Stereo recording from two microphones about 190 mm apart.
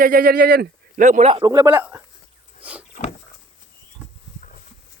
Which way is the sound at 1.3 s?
20° right (ahead or behind).